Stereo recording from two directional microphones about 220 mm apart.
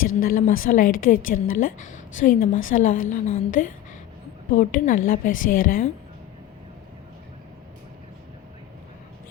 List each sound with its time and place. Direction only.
0.2 s a woman's voice: 40° left (ahead or behind)